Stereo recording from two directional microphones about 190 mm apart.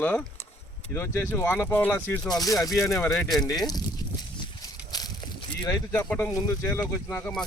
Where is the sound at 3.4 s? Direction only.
20° left (ahead or behind).